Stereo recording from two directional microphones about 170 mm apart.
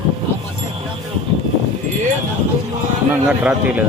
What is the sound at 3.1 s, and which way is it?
Speech, 10° right (ahead or behind).